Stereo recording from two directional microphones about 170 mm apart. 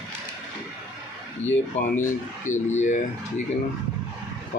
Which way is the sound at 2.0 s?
45° left (ahead or behind).